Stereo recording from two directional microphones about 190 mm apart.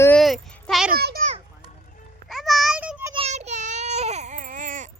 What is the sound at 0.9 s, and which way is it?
Speech, 55° right (ahead or behind).